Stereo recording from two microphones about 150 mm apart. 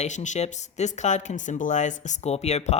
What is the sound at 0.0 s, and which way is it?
Speech, 55° left (ahead or behind).